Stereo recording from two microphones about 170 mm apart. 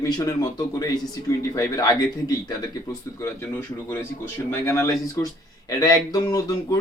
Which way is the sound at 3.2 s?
15° left (ahead or behind).